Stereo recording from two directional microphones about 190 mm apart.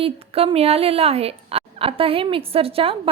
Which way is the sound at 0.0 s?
30° right (ahead or behind).